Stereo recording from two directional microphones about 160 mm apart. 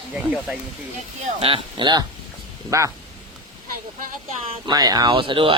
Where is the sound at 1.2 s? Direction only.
35° right (ahead or behind).